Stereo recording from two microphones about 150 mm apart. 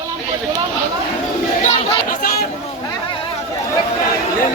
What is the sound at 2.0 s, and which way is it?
Chatter, 75° left (ahead or behind).